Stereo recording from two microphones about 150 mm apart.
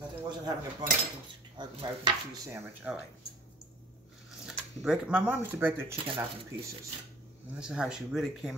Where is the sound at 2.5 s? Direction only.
15° right (ahead or behind).